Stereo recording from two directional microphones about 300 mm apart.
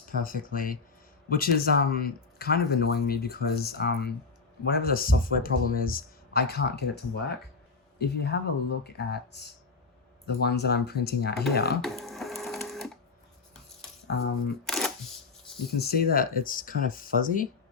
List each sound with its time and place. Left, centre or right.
0.0 s speech: left
11.8 s printer: centre
14.1 s speech: left
14.7 s camera: centre
15.6 s speech: left